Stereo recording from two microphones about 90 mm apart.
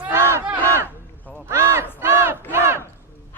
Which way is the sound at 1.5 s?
30° right (ahead or behind).